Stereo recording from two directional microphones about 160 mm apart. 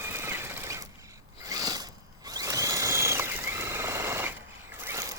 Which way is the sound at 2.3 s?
20° right (ahead or behind).